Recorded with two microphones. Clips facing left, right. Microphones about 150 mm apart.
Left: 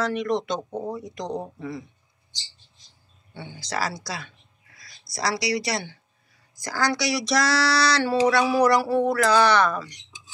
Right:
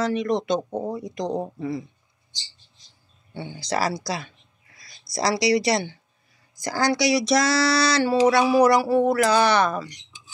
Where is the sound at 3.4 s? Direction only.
20° right (ahead or behind).